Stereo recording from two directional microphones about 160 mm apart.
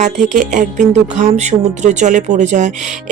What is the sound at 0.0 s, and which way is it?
Speech, 50° right (ahead or behind).